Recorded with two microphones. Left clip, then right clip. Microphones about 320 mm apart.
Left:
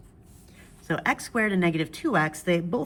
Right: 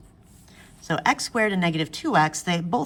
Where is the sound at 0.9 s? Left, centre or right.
Centre.